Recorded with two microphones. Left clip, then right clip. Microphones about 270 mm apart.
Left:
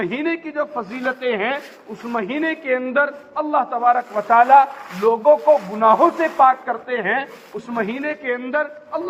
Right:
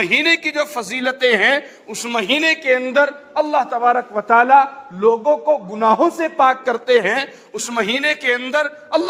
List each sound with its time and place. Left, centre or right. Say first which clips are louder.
0.0 s a man's voice: right 8 dB; right